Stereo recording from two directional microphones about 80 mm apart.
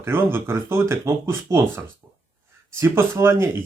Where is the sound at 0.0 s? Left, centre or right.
Right.